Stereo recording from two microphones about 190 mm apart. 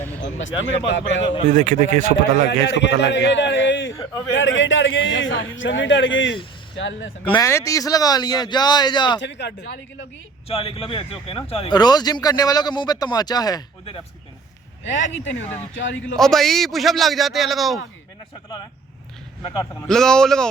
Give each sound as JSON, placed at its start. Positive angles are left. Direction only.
{"t": 0.2, "sound": "a man's voice", "side_deg": 85}
{"t": 1.5, "sound": "speech", "side_deg": -40}
{"t": 2.5, "sound": "a man's voice", "side_deg": 65}
{"t": 7.3, "sound": "speech", "side_deg": 20}
{"t": 9.2, "sound": "a man's voice", "side_deg": 65}
{"t": 10.5, "sound": "speech", "side_deg": 30}
{"t": 14.9, "sound": "a man's voice", "side_deg": 80}
{"t": 16.1, "sound": "a man's voice", "side_deg": 0}
{"t": 19.9, "sound": "a man's voice", "side_deg": 5}